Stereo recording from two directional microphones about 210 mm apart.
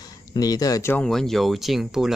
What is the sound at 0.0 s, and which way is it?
Speech, 20° left (ahead or behind).